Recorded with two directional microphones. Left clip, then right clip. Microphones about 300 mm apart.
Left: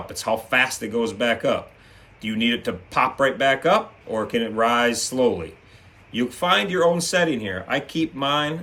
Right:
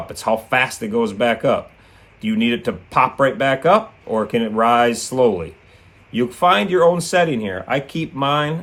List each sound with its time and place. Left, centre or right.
0.1 s speech: centre